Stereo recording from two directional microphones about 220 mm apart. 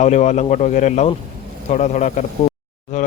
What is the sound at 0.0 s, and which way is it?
A man's voice, 30° left (ahead or behind).